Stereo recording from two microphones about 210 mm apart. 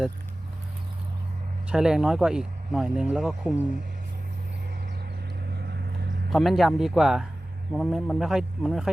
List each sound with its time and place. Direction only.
1.7 s speech: 5° right (ahead or behind)
5.6 s vehicle: 50° right (ahead or behind)
6.3 s speech: centre (ahead or behind)